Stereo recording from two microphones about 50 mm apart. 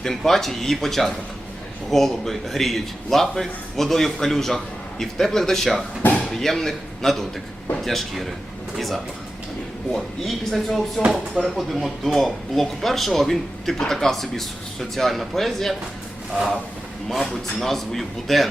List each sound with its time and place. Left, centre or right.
0.3 s a man's voice: centre
6.0 s speech: left
6.3 s a man's voice: centre
9.9 s a man's voice: centre
17.1 s a man's voice: centre